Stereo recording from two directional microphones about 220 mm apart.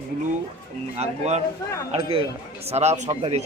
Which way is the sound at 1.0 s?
30° right (ahead or behind).